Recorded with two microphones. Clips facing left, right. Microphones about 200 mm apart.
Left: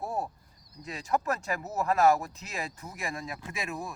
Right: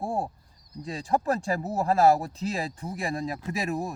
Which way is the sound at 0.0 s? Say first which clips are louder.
Right 4 dB; 30° right (ahead or behind).